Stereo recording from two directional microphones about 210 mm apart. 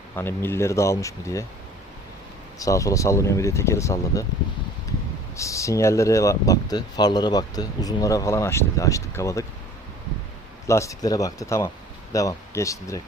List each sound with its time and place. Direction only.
0.2 s speech: 10° left (ahead or behind)
2.6 s speech: 15° left (ahead or behind)
5.4 s speech: 15° left (ahead or behind)
10.7 s speech: 15° left (ahead or behind)